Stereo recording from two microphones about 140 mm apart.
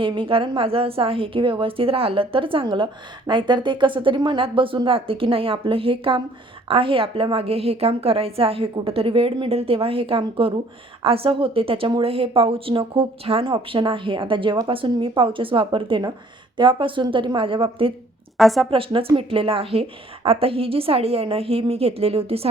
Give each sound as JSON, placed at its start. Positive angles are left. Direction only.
{"t": 0.0, "sound": "a woman's voice", "side_deg": -35}
{"t": 18.3, "sound": "a woman's voice", "side_deg": 0}
{"t": 18.7, "sound": "a woman's voice", "side_deg": -40}